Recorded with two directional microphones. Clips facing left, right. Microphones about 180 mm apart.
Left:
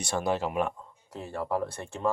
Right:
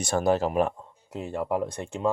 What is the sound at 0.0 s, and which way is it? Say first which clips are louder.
Speech: right 5 dB; 45° right (ahead or behind).